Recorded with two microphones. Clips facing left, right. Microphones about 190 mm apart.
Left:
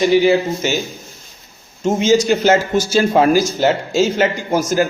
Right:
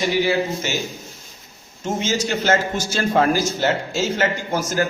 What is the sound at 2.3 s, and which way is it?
A man's voice, 15° left (ahead or behind).